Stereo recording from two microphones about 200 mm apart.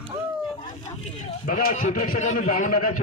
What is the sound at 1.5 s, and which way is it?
Speech, 45° left (ahead or behind).